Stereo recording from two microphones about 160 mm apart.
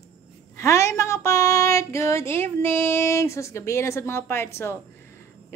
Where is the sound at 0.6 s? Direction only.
20° left (ahead or behind).